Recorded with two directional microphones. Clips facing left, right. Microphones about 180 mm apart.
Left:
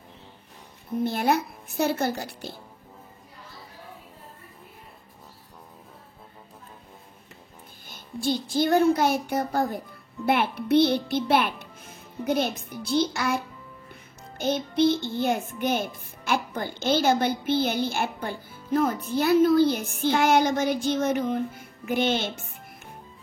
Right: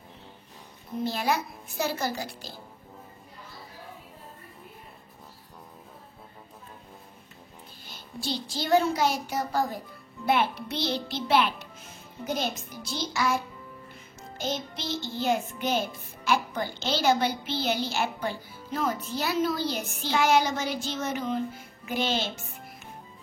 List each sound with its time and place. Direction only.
1.0 s a child's voice: 55° left (ahead or behind)
7.9 s a child's voice: 50° left (ahead or behind)
14.4 s a child's voice: 60° left (ahead or behind)